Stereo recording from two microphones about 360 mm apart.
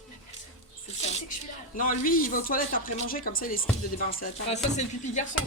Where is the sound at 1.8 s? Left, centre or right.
Left.